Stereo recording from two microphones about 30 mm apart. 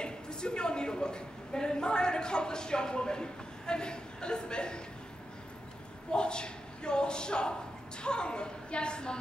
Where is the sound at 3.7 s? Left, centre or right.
Left.